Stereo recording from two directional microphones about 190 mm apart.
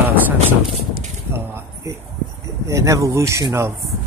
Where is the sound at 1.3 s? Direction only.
10° right (ahead or behind).